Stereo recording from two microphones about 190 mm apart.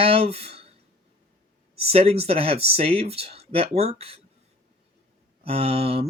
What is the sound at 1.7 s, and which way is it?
Speech, 30° right (ahead or behind).